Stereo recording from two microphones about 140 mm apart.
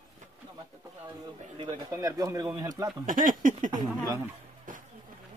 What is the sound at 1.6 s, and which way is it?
Speech, 25° right (ahead or behind).